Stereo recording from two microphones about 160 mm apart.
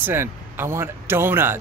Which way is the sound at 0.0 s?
15° right (ahead or behind).